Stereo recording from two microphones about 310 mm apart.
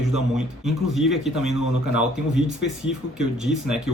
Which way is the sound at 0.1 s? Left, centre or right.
Centre.